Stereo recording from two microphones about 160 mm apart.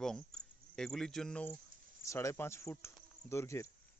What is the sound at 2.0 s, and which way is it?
Speech, 20° left (ahead or behind).